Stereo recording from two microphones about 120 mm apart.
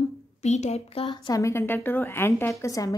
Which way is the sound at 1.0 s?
40° left (ahead or behind).